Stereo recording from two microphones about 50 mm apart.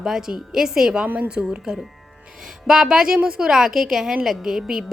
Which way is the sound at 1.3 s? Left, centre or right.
Centre.